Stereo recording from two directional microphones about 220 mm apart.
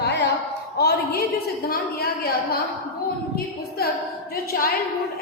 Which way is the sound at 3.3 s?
45° left (ahead or behind).